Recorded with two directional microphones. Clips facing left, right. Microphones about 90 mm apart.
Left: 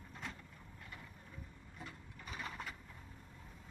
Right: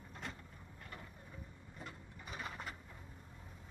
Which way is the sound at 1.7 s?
10° right (ahead or behind).